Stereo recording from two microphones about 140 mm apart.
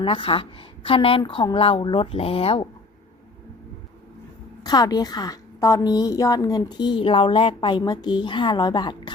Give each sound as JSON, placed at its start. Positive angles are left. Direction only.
{"t": 0.0, "sound": "speech", "side_deg": 40}
{"t": 4.6, "sound": "a woman's voice", "side_deg": 30}